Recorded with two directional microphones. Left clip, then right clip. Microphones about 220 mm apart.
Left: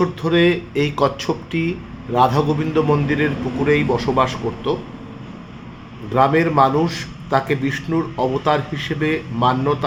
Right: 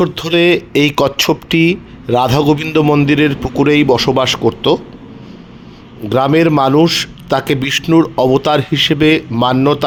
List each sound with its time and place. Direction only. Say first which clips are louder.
0.0 s a man's voice: right 4 dB; 45° right (ahead or behind)
6.1 s a man's voice: right 4 dB; 50° right (ahead or behind)